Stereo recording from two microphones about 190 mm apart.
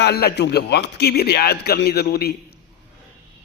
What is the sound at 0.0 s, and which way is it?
Speech, 55° left (ahead or behind).